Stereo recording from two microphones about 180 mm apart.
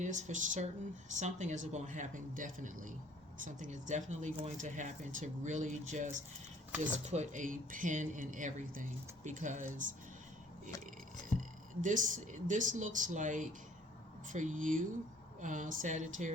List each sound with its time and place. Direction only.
0.0 s speech: 45° right (ahead or behind)
11.8 s speech: 45° right (ahead or behind)